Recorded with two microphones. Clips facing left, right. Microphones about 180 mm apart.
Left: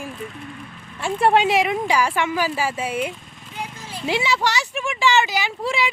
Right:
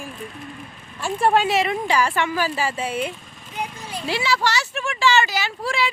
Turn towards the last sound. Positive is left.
turn(degrees=15)  # may be behind; listen again after turning